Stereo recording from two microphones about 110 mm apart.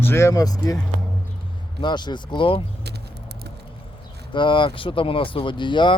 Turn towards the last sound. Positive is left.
turn(degrees=45)  # may be behind; listen again after turning